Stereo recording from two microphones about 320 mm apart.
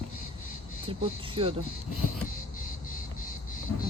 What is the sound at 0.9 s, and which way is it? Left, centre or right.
Speech, centre.